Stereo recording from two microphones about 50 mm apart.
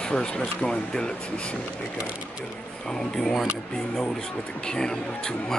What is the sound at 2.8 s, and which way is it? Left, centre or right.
Speech, centre.